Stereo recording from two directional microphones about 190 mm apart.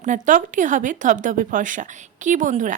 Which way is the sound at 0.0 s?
40° right (ahead or behind).